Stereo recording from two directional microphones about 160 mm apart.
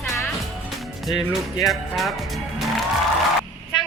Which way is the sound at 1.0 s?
Centre (ahead or behind).